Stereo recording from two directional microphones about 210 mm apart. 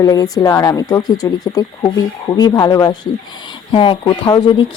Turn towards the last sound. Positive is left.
turn(degrees=20)  # may be behind; listen again after turning